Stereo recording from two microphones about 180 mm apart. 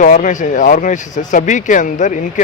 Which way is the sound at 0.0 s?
45° left (ahead or behind).